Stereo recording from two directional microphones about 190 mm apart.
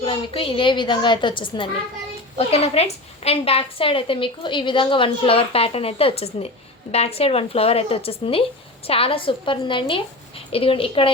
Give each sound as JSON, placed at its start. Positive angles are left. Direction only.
{"t": 0.0, "sound": "a woman's voice", "side_deg": 30}